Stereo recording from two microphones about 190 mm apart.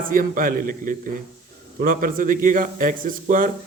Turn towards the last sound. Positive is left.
turn(degrees=-45)  # may be behind; listen again after turning